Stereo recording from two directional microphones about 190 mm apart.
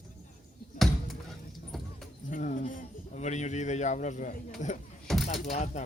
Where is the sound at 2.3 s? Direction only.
45° left (ahead or behind).